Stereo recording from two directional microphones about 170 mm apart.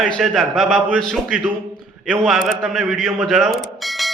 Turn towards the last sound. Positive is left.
turn(degrees=0)  # may be behind; listen again after turning